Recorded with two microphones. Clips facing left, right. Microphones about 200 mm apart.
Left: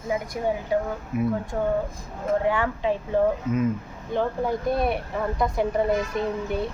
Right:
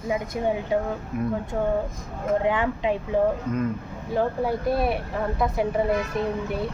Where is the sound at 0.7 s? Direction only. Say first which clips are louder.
Left 1 dB; 20° right (ahead or behind).